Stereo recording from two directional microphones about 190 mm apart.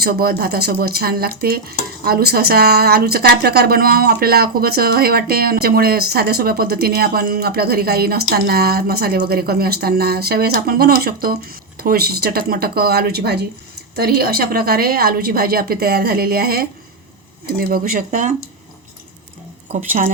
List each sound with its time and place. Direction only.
0.0 s speech: 55° right (ahead or behind)